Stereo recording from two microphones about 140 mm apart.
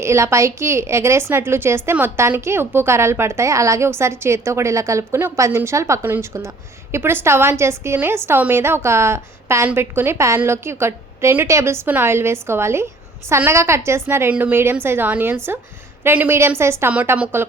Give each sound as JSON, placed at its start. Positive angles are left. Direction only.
{"t": 0.0, "sound": "a woman's voice", "side_deg": -20}